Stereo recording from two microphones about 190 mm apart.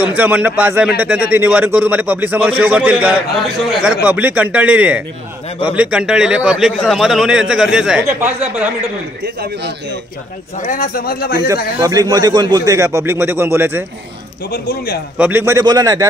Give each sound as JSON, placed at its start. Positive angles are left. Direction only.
{"t": 0.0, "sound": "a man's voice", "side_deg": -10}
{"t": 9.2, "sound": "a man's voice", "side_deg": -65}
{"t": 10.7, "sound": "speech", "side_deg": 50}
{"t": 11.4, "sound": "a man's voice", "side_deg": -20}
{"t": 15.1, "sound": "a man's voice", "side_deg": -10}